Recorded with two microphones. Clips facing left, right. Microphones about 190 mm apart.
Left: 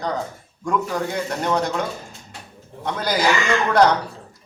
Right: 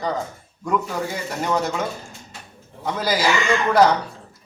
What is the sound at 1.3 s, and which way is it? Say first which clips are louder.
Speech: right 1 dB; 5° right (ahead or behind).